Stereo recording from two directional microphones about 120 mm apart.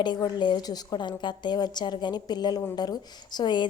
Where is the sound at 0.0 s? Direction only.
35° left (ahead or behind).